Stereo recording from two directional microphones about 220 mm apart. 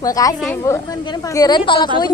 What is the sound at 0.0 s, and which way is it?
A woman's voice, 15° left (ahead or behind).